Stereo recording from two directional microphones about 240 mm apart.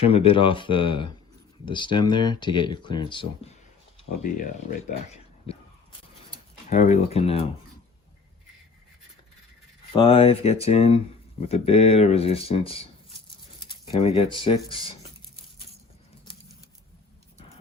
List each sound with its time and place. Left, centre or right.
0.0 s speech: left
4.9 s speech: left
9.9 s speech: left